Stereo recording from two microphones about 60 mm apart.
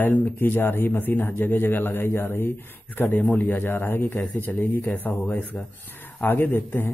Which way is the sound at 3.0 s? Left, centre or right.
Left.